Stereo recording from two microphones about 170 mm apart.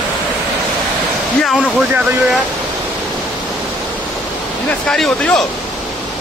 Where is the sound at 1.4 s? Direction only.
Centre (ahead or behind).